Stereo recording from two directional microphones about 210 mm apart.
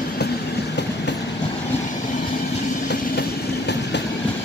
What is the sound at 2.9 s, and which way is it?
Train, 55° left (ahead or behind).